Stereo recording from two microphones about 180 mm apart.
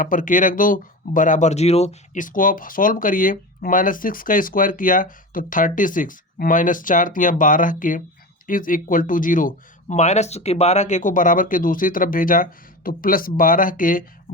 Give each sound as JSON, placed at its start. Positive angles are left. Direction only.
{"t": 0.0, "sound": "speech", "side_deg": 45}